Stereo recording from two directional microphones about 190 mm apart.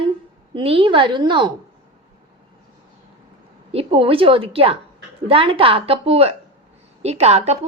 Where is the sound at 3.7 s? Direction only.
30° right (ahead or behind).